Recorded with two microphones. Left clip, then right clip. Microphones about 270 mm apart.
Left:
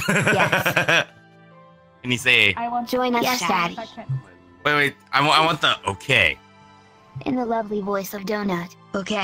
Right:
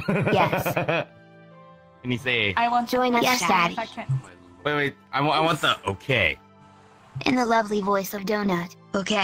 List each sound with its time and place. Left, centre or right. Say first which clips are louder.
0.0 s speech: left 3 dB; left
2.0 s speech: left 7 dB; left
2.5 s speech: right 4 dB; right
2.8 s speech: even; centre
4.6 s speech: left 5 dB; left
5.5 s speech: left 2 dB; centre
7.2 s speech: right 3 dB; right
7.9 s speech: right 1 dB; centre
8.9 s speech: right 1 dB; centre